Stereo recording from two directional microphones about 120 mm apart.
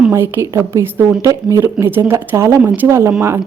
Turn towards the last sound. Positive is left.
turn(degrees=-20)  # may be behind; listen again after turning